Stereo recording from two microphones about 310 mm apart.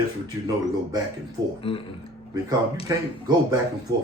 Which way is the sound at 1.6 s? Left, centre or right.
Centre.